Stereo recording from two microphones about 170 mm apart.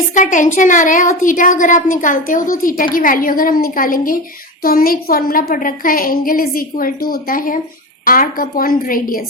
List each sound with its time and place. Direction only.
0.1 s a woman's voice: 50° left (ahead or behind)